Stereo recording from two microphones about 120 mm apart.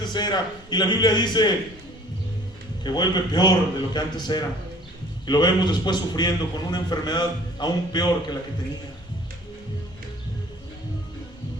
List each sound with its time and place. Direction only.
0.0 s a man's voice: 35° left (ahead or behind)
2.8 s a man's voice: 35° left (ahead or behind)